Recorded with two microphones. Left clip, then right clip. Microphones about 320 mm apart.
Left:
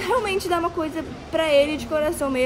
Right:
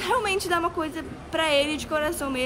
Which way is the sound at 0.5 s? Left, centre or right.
Centre.